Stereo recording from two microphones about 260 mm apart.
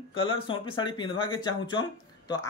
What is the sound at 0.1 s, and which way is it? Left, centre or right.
A man's voice, centre.